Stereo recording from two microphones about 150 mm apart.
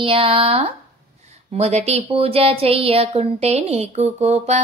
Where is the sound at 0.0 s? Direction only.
35° right (ahead or behind).